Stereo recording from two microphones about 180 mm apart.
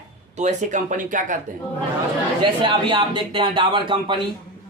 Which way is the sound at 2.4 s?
30° right (ahead or behind).